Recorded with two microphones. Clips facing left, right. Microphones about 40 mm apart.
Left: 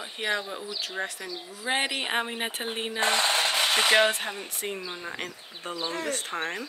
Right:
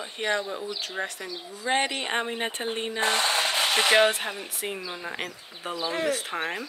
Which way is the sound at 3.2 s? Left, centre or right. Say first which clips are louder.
Even; right.